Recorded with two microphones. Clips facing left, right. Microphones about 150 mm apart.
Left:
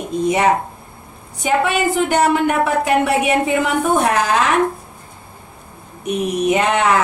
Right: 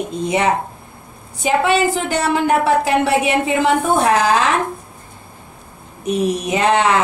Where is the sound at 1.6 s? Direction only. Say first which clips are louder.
Right 1 dB; 30° right (ahead or behind).